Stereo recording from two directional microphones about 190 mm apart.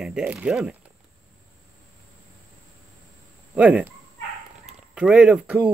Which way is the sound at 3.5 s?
5° right (ahead or behind).